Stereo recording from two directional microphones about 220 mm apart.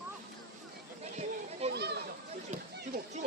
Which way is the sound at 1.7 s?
50° right (ahead or behind).